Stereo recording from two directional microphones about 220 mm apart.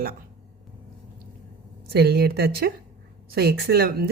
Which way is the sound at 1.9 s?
45° right (ahead or behind).